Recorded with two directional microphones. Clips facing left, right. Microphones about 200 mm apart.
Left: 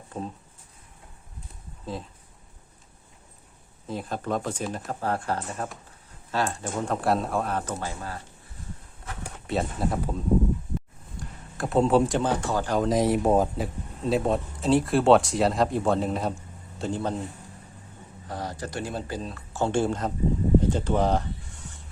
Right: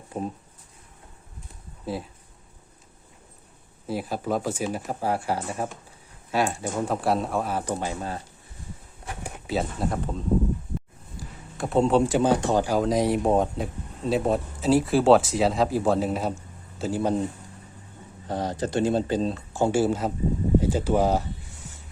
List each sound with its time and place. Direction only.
0.1 s speech: 15° right (ahead or behind)
3.8 s speech: 10° right (ahead or behind)
9.5 s speech: centre (ahead or behind)
11.2 s a sound: centre (ahead or behind)
12.2 s speech: 15° right (ahead or behind)
12.7 s speech: centre (ahead or behind)
18.3 s speech: 25° right (ahead or behind)
19.6 s speech: 5° right (ahead or behind)